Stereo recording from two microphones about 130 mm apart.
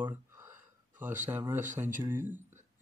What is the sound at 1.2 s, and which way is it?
Speech, 15° right (ahead or behind).